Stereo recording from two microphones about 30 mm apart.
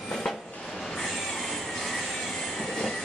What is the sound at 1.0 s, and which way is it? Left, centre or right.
Train, centre.